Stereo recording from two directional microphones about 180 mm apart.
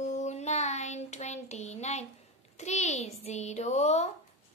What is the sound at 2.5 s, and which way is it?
A child's voice, 40° left (ahead or behind).